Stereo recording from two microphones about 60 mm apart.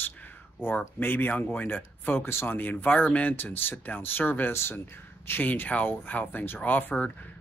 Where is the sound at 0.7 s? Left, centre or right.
Left.